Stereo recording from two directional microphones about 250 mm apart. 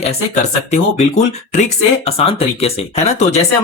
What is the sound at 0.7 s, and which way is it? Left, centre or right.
Speech, left.